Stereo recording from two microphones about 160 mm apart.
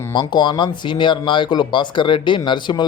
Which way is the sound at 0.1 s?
30° left (ahead or behind).